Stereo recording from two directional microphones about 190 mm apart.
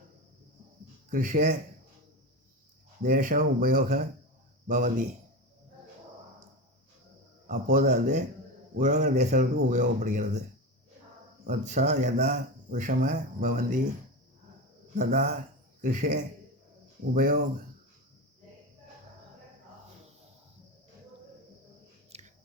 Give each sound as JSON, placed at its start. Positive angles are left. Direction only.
{"t": 1.1, "sound": "speech", "side_deg": -40}
{"t": 3.0, "sound": "speech", "side_deg": -45}
{"t": 7.7, "sound": "speech", "side_deg": -40}
{"t": 11.4, "sound": "speech", "side_deg": -40}
{"t": 15.0, "sound": "speech", "side_deg": -40}
{"t": 22.1, "sound": "chewing", "side_deg": -35}